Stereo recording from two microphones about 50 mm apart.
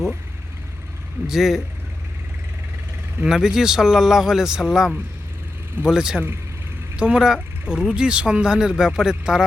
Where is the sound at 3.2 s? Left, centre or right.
Centre.